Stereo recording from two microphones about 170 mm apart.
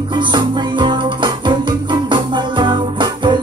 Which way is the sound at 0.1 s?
30° right (ahead or behind).